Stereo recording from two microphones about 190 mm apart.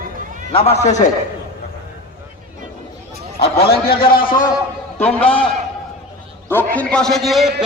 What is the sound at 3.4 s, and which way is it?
Speech, 55° left (ahead or behind).